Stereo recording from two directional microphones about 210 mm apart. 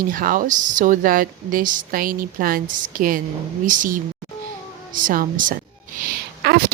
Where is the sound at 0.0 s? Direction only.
40° right (ahead or behind).